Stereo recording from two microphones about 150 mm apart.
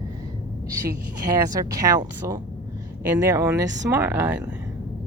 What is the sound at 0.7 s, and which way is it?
Speech, 20° right (ahead or behind).